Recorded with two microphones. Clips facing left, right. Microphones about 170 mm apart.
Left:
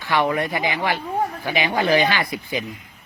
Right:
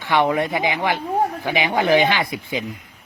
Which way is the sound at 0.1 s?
20° right (ahead or behind).